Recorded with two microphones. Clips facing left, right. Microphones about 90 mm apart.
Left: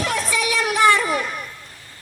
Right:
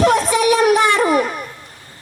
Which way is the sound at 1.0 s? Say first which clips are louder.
Right 7 dB; 30° right (ahead or behind).